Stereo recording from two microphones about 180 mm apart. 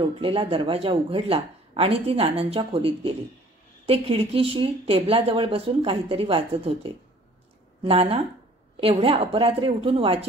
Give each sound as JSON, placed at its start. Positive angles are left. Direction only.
{"t": 0.0, "sound": "speech", "side_deg": -30}